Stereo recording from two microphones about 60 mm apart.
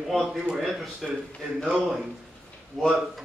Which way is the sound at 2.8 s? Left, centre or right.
Centre.